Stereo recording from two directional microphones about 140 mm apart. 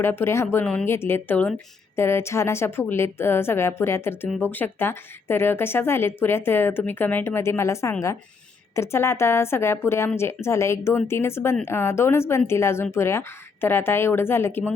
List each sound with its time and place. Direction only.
0.0 s a woman's voice: 15° left (ahead or behind)
0.6 s speech: 5° left (ahead or behind)
0.9 s a woman's voice: 15° left (ahead or behind)